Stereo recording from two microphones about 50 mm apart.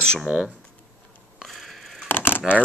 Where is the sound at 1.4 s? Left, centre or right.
Centre.